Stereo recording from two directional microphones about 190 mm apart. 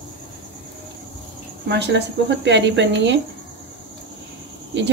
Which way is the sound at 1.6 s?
65° right (ahead or behind).